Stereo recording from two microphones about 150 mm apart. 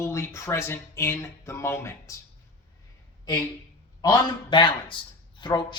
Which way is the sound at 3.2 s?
20° left (ahead or behind).